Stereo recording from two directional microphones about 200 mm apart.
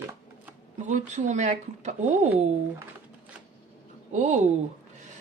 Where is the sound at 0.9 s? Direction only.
35° right (ahead or behind).